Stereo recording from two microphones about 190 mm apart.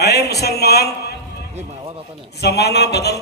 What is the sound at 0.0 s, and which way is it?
Speech, 60° left (ahead or behind).